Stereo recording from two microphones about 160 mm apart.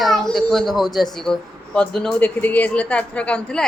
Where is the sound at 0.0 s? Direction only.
Centre (ahead or behind).